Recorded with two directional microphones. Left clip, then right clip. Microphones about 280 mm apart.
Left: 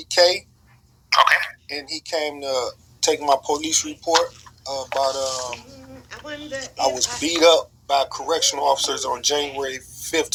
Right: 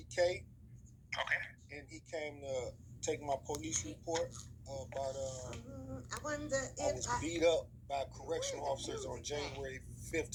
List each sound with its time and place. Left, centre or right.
0.0 s speech: left
6.1 s speech: centre
6.7 s speech: left